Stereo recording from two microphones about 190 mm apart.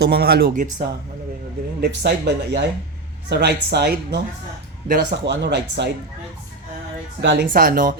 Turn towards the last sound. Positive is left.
turn(degrees=-50)  # may be behind; listen again after turning